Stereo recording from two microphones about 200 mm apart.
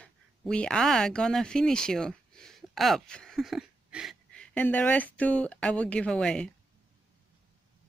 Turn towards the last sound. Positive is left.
turn(degrees=5)  # may be behind; listen again after turning